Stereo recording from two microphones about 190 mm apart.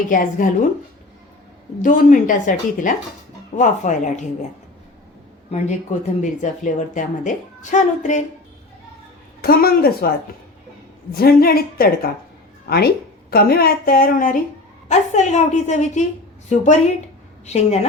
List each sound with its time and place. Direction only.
0.1 s a woman's voice: 45° left (ahead or behind)
1.8 s a woman's voice: 45° left (ahead or behind)
5.5 s a woman's voice: 40° left (ahead or behind)
9.4 s a woman's voice: 50° left (ahead or behind)
11.1 s a woman's voice: 55° left (ahead or behind); by 17.7 s 35° left (ahead or behind)